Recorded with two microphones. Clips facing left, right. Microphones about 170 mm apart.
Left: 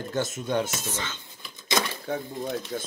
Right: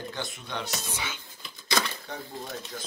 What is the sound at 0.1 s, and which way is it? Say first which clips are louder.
Speech: left 9 dB; 45° left (ahead or behind).